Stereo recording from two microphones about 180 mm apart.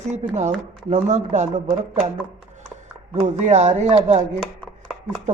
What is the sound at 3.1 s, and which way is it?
Speech, 40° right (ahead or behind).